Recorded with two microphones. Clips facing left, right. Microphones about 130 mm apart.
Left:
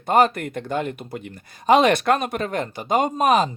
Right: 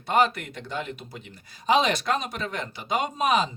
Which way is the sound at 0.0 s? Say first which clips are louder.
Left 5 dB; 50° left (ahead or behind).